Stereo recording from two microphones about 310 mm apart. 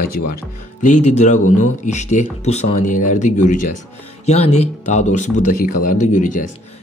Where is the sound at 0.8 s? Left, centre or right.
Left.